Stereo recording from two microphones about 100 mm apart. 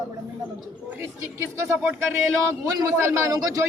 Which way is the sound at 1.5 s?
30° right (ahead or behind).